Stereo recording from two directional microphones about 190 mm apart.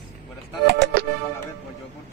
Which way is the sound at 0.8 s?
65° right (ahead or behind).